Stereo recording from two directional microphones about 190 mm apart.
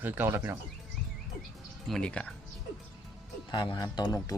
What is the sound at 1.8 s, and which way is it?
Speech, 5° left (ahead or behind).